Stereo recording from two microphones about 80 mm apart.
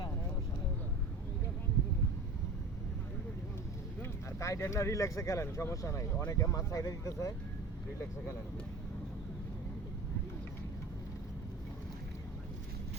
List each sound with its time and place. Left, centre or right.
4.0 s vehicle: left
4.7 s speech: left